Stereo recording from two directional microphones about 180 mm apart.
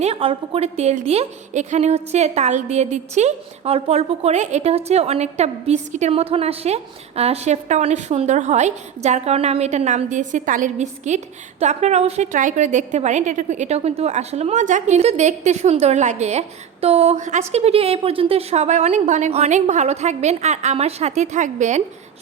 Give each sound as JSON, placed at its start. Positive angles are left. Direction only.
{"t": 0.0, "sound": "a woman's voice", "side_deg": -30}